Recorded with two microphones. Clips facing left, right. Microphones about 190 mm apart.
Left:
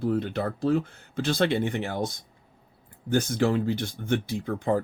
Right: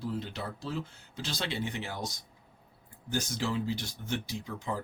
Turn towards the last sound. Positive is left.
turn(degrees=55)  # may be behind; listen again after turning